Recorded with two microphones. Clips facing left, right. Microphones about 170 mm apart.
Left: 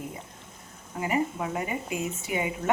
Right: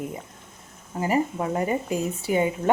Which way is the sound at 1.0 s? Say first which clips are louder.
Right 4 dB; 35° right (ahead or behind).